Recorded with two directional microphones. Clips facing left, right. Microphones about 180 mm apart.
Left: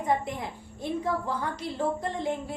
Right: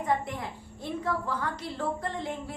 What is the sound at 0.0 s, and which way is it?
A woman's voice, 15° left (ahead or behind).